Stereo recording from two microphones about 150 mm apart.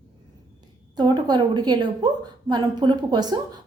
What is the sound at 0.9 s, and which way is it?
A woman's voice, 30° right (ahead or behind).